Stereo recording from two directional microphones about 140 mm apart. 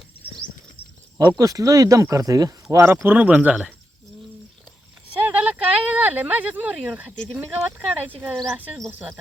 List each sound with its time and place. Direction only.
1.3 s speech: 25° right (ahead or behind); by 3.7 s 10° right (ahead or behind)
5.2 s a sound: 10° right (ahead or behind)
7.3 s speech: 10° right (ahead or behind)